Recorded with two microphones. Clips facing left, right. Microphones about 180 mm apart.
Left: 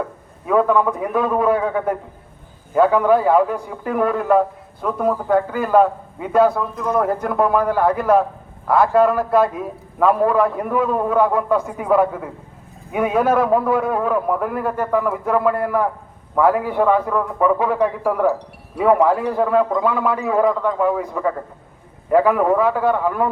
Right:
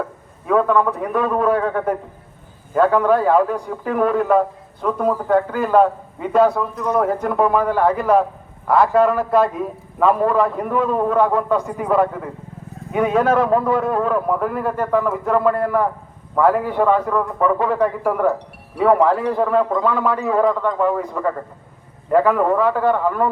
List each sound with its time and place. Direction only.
0.0 s a man's voice: 5° left (ahead or behind)